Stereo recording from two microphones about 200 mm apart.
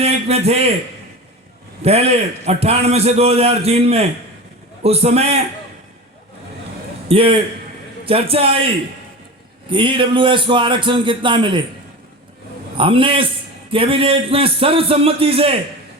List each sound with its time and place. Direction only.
0.0 s a man's voice: 30° right (ahead or behind)
1.8 s a man's voice: 30° right (ahead or behind)
7.1 s a man's voice: 25° right (ahead or behind)
9.6 s a man's voice: 25° right (ahead or behind)
12.7 s a man's voice: 25° right (ahead or behind)